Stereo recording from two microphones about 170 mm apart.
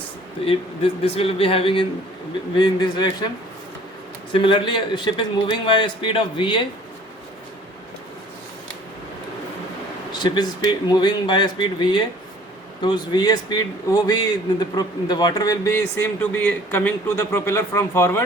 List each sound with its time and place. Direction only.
0.4 s a man's voice: 35° left (ahead or behind)
4.3 s a man's voice: 30° left (ahead or behind)
10.1 s a man's voice: 25° left (ahead or behind)